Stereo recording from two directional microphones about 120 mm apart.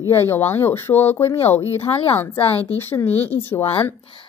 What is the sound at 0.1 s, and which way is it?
A woman's voice, 20° left (ahead or behind).